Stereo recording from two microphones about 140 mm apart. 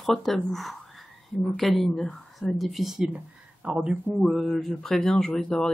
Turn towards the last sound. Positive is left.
turn(degrees=5)  # may be behind; listen again after turning